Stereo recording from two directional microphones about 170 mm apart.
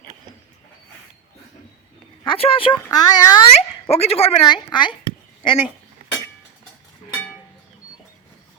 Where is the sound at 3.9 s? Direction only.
35° left (ahead or behind).